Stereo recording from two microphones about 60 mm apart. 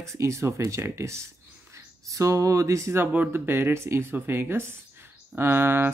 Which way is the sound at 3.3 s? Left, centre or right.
Right.